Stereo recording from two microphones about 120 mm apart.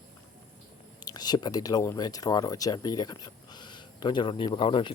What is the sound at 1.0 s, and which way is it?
Speech, 35° left (ahead or behind).